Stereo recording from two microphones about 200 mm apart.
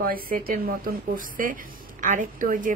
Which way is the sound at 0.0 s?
45° right (ahead or behind).